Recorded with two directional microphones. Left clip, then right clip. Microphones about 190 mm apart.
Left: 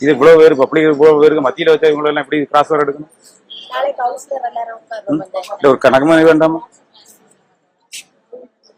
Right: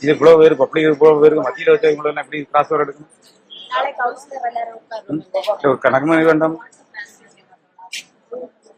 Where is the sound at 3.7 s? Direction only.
20° left (ahead or behind).